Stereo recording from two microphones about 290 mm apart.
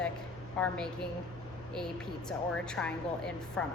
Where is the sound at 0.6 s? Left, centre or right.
Centre.